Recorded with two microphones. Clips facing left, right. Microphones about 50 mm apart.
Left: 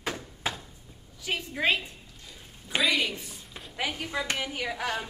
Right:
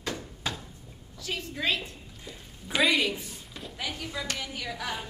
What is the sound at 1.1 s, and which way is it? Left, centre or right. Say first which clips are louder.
Speech: left 3 dB; centre.